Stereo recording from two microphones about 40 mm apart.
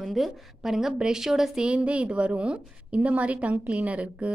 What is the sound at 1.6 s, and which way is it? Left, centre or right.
A woman's voice, right.